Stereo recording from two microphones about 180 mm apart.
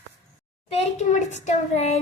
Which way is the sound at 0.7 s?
40° left (ahead or behind).